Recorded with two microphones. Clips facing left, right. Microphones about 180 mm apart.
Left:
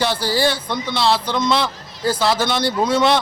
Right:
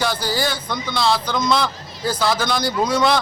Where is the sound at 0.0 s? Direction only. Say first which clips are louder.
Left 3 dB; 30° left (ahead or behind).